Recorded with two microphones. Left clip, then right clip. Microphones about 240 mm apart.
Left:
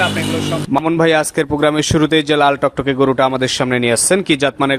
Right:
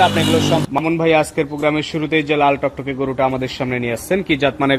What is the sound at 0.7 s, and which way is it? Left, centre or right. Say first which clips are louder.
A man's voice: left 7 dB; left.